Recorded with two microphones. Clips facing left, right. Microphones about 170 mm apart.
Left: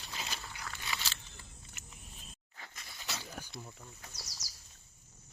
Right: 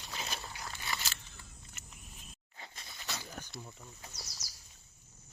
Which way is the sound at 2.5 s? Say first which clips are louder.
Right 1 dB; 25° right (ahead or behind).